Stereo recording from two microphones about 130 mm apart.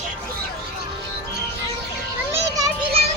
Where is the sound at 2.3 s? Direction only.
25° right (ahead or behind).